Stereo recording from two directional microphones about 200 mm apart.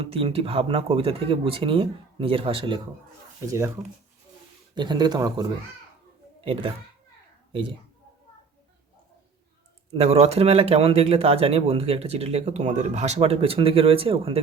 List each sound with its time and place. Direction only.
0.0 s speech: 25° right (ahead or behind)
4.7 s speech: 20° right (ahead or behind)
9.9 s speech: 30° right (ahead or behind)